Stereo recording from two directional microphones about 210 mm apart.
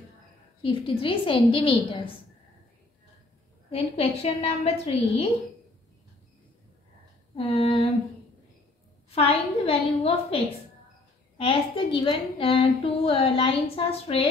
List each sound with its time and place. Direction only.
0.6 s a woman's voice: 25° left (ahead or behind)
3.7 s a woman's voice: 30° left (ahead or behind)
7.3 s a woman's voice: 25° left (ahead or behind)
9.1 s a woman's voice: 30° left (ahead or behind)